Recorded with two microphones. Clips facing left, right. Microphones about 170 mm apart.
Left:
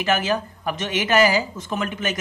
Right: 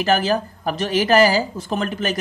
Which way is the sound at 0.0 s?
35° right (ahead or behind).